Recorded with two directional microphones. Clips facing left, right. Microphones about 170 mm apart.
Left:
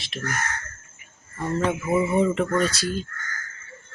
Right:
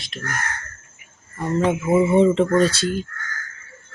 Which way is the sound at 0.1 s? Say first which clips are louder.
Left 1 dB; 5° left (ahead or behind).